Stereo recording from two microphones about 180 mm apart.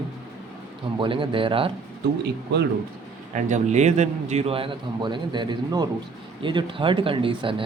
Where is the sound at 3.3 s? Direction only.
40° right (ahead or behind).